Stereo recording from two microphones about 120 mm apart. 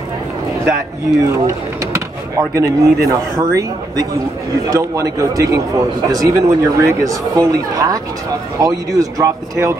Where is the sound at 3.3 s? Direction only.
30° right (ahead or behind).